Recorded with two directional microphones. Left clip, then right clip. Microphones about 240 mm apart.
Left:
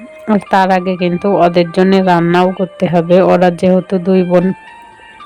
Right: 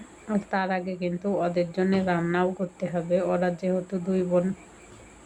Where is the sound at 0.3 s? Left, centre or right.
Left.